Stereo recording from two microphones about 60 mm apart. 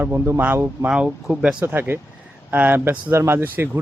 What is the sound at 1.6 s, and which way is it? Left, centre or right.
Speech, right.